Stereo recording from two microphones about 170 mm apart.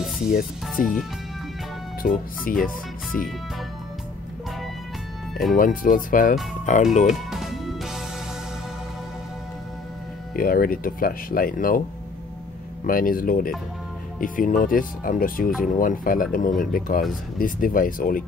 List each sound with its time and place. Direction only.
0.3 s speech: 55° left (ahead or behind)
2.0 s speech: 55° left (ahead or behind)
5.6 s speech: 55° left (ahead or behind)
7.2 s music: centre (ahead or behind)
10.3 s speech: 60° left (ahead or behind)
12.8 s speech: 55° left (ahead or behind)